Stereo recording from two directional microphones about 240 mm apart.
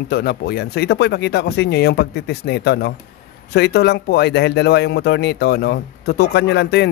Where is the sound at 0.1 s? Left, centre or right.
Left.